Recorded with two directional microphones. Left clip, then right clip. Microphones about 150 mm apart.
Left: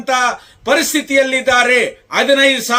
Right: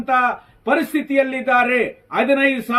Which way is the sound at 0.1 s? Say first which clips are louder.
Left 2 dB; 20° left (ahead or behind).